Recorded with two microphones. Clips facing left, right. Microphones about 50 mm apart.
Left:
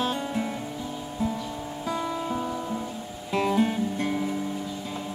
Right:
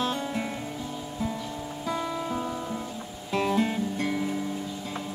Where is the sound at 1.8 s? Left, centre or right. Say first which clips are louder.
Left 1 dB; centre.